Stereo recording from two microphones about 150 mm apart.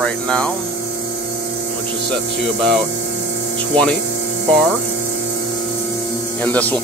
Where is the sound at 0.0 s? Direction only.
5° left (ahead or behind).